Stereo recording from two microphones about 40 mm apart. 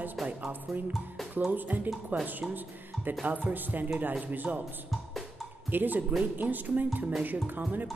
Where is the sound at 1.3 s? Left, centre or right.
Right.